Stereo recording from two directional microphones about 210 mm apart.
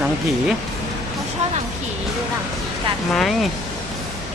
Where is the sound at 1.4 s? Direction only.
35° right (ahead or behind).